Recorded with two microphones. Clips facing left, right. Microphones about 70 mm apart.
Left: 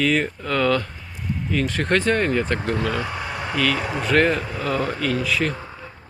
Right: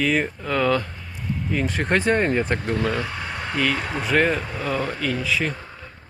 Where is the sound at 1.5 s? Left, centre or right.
Centre.